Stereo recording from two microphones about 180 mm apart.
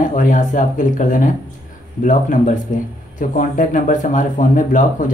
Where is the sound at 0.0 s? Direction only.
45° left (ahead or behind).